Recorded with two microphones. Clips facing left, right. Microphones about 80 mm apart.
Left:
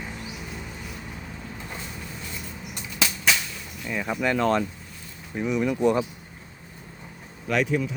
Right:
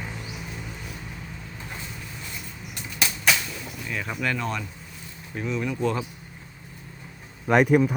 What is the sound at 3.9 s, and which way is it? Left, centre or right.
Speech, centre.